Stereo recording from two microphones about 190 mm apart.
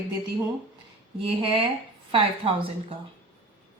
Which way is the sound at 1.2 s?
30° right (ahead or behind).